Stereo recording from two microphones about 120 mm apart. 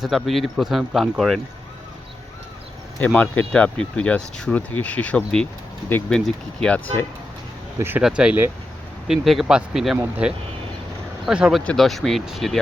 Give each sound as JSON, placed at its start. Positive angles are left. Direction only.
{"t": 0.0, "sound": "speech", "side_deg": 0}
{"t": 3.0, "sound": "speech", "side_deg": 15}
{"t": 7.8, "sound": "speech", "side_deg": -15}
{"t": 11.6, "sound": "speech", "side_deg": 5}